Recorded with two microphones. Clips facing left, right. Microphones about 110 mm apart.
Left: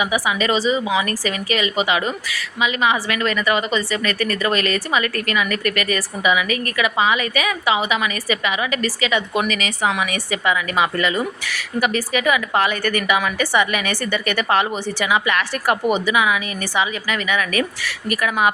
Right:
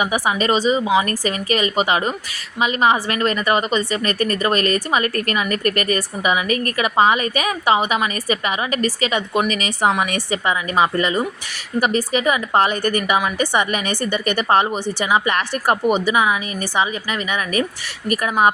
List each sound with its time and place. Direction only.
0.0 s a woman's voice: 40° right (ahead or behind)
0.5 s speech: 20° right (ahead or behind)
1.5 s a woman's voice: 40° right (ahead or behind)
3.7 s a woman's voice: 25° right (ahead or behind)
18.1 s a woman's voice: 35° right (ahead or behind)